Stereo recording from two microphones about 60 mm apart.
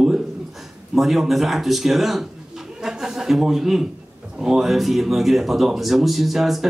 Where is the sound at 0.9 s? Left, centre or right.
Centre.